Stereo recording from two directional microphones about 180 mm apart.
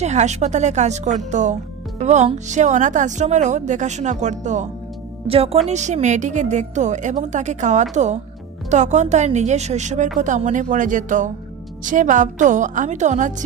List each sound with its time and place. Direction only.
0.0 s a woman's voice: 40° right (ahead or behind)